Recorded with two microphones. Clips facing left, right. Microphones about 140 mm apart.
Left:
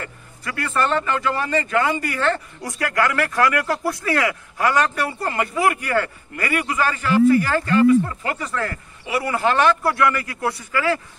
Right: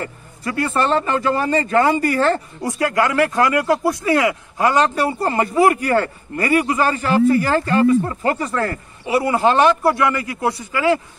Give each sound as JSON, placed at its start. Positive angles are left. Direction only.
{"t": 0.0, "sound": "speech", "side_deg": -30}
{"t": 2.8, "sound": "speech", "side_deg": -20}